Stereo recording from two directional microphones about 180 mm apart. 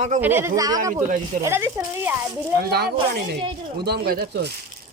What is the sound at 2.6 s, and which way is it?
Speech, 60° right (ahead or behind).